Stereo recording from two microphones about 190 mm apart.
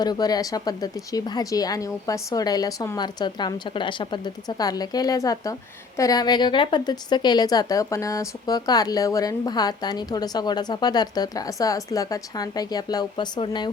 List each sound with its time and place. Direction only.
0.0 s a woman's voice: 20° left (ahead or behind)